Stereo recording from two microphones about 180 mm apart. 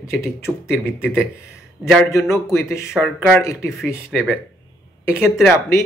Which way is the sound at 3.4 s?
15° left (ahead or behind).